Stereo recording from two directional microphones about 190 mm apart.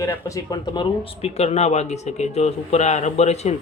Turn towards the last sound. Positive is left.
turn(degrees=35)  # may be behind; listen again after turning